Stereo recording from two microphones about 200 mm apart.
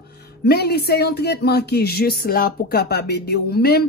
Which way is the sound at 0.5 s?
55° left (ahead or behind).